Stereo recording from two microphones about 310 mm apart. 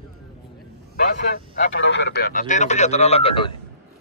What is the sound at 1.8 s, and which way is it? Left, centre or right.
Speech, left.